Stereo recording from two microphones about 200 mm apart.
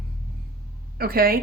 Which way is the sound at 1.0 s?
45° right (ahead or behind).